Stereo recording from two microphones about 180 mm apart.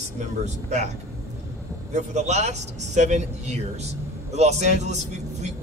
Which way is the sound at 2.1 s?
40° right (ahead or behind).